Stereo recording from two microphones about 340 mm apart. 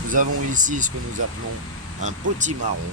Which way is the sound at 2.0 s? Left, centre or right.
Right.